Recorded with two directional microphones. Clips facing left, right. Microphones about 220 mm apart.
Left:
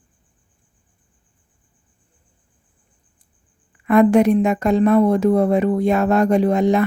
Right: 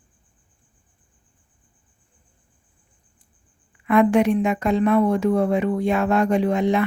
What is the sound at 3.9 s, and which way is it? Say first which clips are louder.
Speech: left 4 dB; 40° left (ahead or behind).